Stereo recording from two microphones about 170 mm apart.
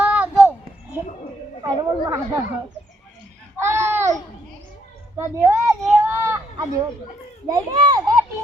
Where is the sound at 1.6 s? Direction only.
15° right (ahead or behind).